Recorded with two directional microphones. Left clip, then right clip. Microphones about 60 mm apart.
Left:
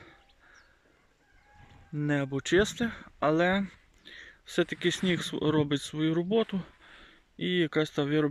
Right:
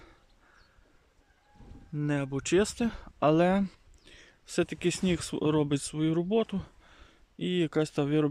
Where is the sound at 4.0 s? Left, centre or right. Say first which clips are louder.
Left 7 dB; centre.